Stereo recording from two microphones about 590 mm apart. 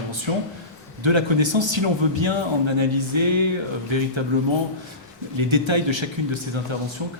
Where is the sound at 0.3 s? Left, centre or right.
Right.